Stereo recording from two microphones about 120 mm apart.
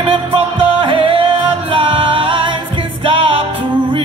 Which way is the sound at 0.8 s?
50° right (ahead or behind).